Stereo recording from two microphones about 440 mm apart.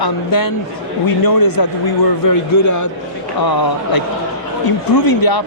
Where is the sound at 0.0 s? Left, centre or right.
Left.